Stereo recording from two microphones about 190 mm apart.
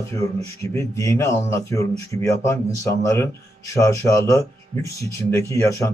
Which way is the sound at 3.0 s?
15° left (ahead or behind).